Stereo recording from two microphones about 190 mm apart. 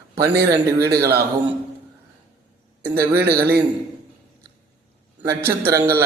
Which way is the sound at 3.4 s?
55° right (ahead or behind).